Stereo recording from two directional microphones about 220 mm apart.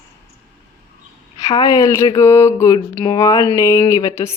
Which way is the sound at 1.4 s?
15° left (ahead or behind).